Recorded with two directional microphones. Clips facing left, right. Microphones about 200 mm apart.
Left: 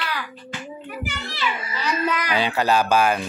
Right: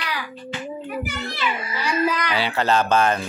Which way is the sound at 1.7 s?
10° right (ahead or behind).